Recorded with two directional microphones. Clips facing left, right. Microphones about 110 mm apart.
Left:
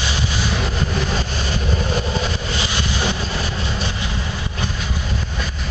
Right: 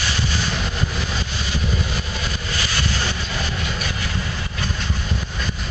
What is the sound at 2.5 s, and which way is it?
Vehicle, 20° left (ahead or behind).